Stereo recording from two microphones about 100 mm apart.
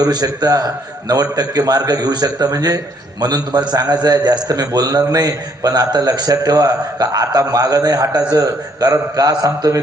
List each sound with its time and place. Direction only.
0.0 s a man's voice: 40° right (ahead or behind)